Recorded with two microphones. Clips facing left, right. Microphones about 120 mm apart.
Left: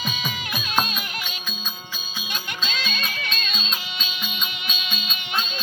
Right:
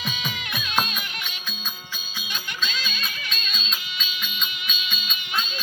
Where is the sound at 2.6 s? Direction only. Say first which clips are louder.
Left 4 dB; 55° left (ahead or behind).